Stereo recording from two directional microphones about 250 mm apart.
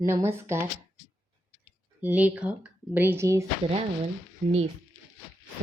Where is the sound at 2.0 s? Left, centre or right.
Centre.